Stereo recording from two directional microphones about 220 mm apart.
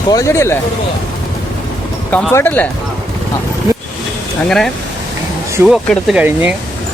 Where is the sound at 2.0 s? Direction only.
5° left (ahead or behind).